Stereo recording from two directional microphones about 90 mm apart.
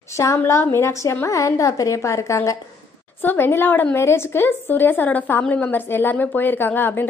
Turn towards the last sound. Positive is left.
turn(degrees=20)  # may be behind; listen again after turning